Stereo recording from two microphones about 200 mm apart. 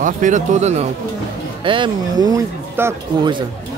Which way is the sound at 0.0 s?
40° right (ahead or behind).